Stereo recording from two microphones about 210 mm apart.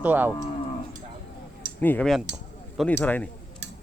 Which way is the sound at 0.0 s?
10° right (ahead or behind).